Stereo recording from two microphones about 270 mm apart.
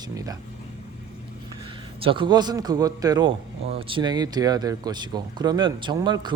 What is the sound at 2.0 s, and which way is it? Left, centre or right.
Speech, centre.